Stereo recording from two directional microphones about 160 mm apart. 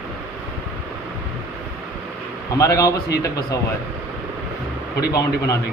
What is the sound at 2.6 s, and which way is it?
Speech, 20° left (ahead or behind).